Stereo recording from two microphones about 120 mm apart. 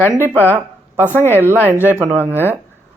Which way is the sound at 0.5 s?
15° right (ahead or behind).